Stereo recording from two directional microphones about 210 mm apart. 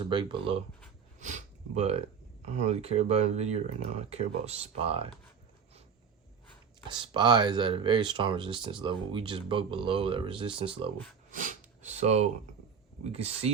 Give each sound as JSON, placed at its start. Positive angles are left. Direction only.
{"t": 0.0, "sound": "speech", "side_deg": -20}
{"t": 1.2, "sound": "a sound", "side_deg": -35}
{"t": 2.4, "sound": "speech", "side_deg": -30}
{"t": 6.8, "sound": "speech", "side_deg": -25}
{"t": 11.3, "sound": "sniff", "side_deg": -40}
{"t": 13.1, "sound": "speech", "side_deg": -30}